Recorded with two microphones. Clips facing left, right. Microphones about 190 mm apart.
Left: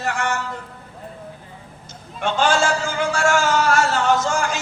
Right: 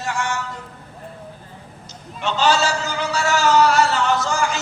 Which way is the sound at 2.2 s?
50° left (ahead or behind).